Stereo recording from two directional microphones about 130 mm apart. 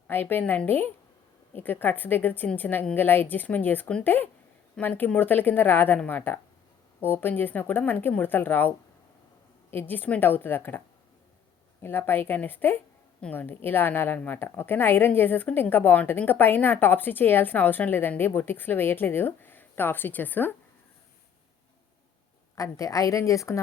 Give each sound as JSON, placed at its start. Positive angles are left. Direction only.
{"t": 0.1, "sound": "a woman's voice", "side_deg": 15}
{"t": 9.7, "sound": "a woman's voice", "side_deg": 15}
{"t": 22.5, "sound": "a woman's voice", "side_deg": 25}